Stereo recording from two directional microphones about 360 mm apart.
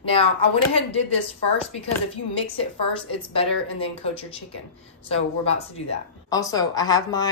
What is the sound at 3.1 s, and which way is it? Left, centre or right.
A woman's voice, centre.